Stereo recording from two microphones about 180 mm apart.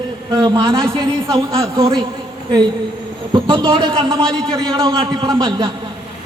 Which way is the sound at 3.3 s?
30° right (ahead or behind).